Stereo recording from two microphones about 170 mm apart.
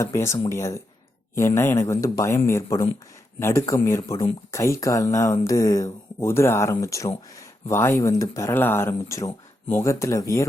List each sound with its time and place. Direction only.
0.0 s speech: 15° left (ahead or behind)